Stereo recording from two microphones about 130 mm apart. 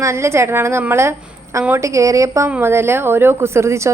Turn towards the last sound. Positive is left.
turn(degrees=-20)  # may be behind; listen again after turning